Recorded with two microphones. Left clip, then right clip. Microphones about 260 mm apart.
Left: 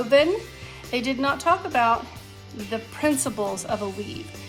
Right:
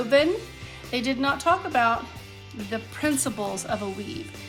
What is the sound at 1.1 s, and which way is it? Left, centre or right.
Speech, left.